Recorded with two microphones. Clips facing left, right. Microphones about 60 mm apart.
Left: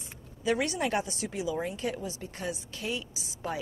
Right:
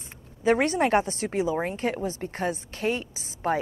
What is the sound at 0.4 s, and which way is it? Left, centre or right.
A woman's voice, right.